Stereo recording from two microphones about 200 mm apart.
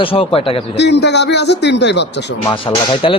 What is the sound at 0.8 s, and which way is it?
A man's voice, 60° left (ahead or behind).